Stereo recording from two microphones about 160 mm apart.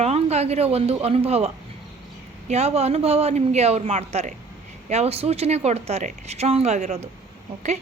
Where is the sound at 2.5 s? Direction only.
40° right (ahead or behind).